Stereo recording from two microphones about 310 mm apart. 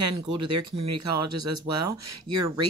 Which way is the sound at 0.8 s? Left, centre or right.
Right.